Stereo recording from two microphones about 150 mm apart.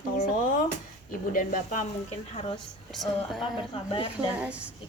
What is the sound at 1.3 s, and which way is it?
Speech, 60° left (ahead or behind).